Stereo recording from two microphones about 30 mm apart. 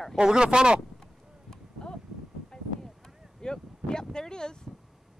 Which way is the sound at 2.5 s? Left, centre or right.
Centre.